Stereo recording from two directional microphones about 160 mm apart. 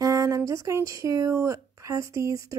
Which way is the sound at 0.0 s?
20° right (ahead or behind).